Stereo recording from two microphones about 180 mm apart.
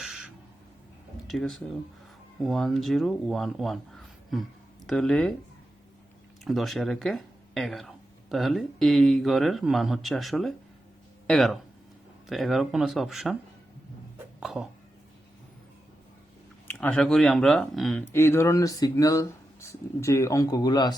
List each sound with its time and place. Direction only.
0.0 s owl: 5° right (ahead or behind)
1.3 s speech: centre (ahead or behind)
6.4 s speech: centre (ahead or behind)
14.4 s a sound: centre (ahead or behind)
16.6 s speech: 10° left (ahead or behind)
18.1 s speech: 15° left (ahead or behind)